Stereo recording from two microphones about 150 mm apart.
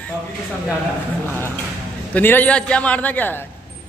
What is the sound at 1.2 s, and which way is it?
A man's voice, 15° left (ahead or behind).